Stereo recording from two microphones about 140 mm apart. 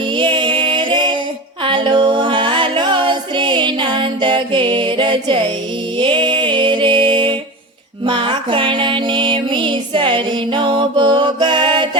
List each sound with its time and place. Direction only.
0.2 s music: 35° right (ahead or behind)